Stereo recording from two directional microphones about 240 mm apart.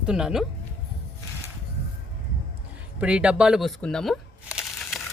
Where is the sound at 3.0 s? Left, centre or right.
Centre.